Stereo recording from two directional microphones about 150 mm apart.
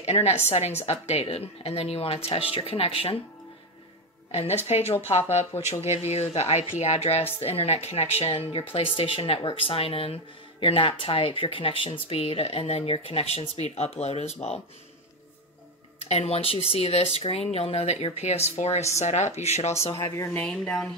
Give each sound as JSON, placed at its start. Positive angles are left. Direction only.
{"t": 0.0, "sound": "speech", "side_deg": 45}
{"t": 4.3, "sound": "a woman's voice", "side_deg": 45}
{"t": 16.1, "sound": "speech", "side_deg": 45}
{"t": 19.9, "sound": "speech", "side_deg": 20}
{"t": 20.3, "sound": "speech", "side_deg": 10}